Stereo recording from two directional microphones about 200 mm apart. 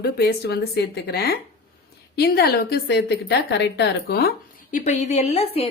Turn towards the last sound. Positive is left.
turn(degrees=30)  # may be behind; listen again after turning